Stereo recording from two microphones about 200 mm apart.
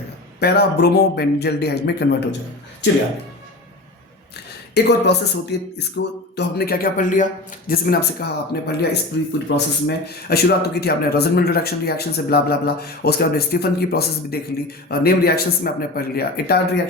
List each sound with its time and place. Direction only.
0.3 s speech: 55° left (ahead or behind)
4.7 s speech: 55° left (ahead or behind)